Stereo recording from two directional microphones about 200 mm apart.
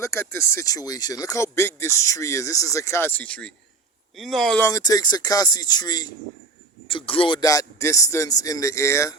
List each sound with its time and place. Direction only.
0.0 s speech: 15° left (ahead or behind)
4.6 s speech: 20° left (ahead or behind)